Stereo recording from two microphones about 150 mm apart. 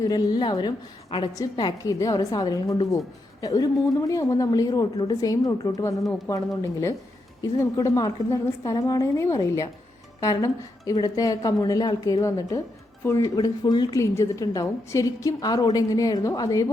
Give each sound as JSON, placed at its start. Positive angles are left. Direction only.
{"t": 0.0, "sound": "a woman's voice", "side_deg": 25}
{"t": 7.4, "sound": "a woman's voice", "side_deg": 20}